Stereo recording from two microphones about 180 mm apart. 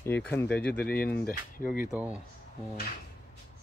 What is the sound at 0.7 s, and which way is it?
Speech, 60° left (ahead or behind).